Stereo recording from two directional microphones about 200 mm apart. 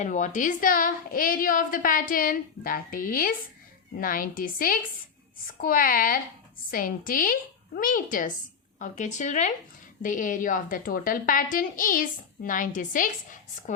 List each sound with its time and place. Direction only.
0.0 s a woman's voice: 40° left (ahead or behind)